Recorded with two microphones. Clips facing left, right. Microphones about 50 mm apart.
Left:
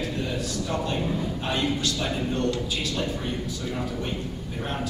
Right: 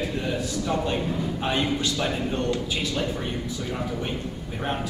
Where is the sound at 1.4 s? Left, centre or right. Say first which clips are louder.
Right 2 dB; right.